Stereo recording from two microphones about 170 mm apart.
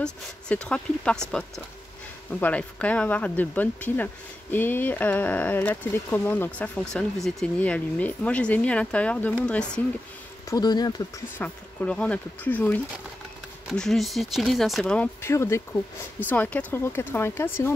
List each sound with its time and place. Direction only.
0.0 s speech: 5° left (ahead or behind)
2.4 s speech: 10° left (ahead or behind)
10.5 s speech: 25° left (ahead or behind)
11.3 s speech: 10° left (ahead or behind)
15.2 s speech: 15° left (ahead or behind)